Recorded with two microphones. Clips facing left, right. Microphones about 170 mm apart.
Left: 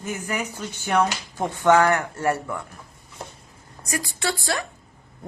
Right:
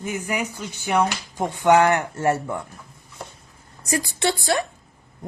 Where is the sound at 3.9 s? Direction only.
25° right (ahead or behind).